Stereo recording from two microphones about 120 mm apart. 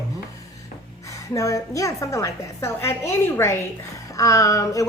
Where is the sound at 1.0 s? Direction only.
25° left (ahead or behind).